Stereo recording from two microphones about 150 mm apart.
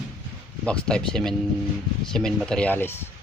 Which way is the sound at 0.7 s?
5° left (ahead or behind).